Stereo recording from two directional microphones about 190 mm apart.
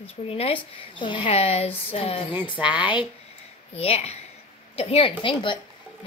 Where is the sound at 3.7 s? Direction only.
30° left (ahead or behind).